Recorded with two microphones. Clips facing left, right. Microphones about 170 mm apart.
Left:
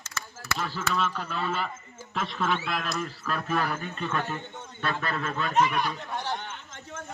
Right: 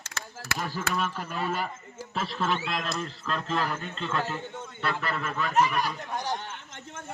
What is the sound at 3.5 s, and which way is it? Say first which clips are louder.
A man's voice: left 2 dB; 10° left (ahead or behind).